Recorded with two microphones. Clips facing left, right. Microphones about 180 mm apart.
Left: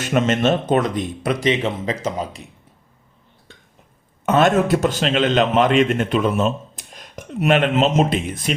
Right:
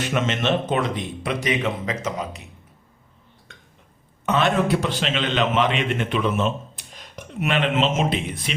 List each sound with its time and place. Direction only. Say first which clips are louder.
0.0 s a man's voice: left 5 dB; 40° left (ahead or behind)
1.5 s speech: left 3 dB; 30° left (ahead or behind)
4.3 s a man's voice: left 4 dB; 45° left (ahead or behind)